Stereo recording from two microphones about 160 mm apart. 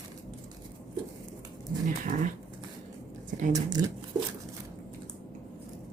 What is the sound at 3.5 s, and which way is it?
Speech, 25° right (ahead or behind).